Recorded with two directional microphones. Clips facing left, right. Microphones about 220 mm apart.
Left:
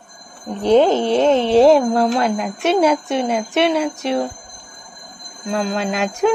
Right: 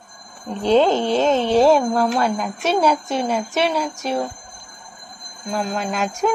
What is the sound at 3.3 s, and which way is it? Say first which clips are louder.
Speech: left 5 dB; 60° left (ahead or behind).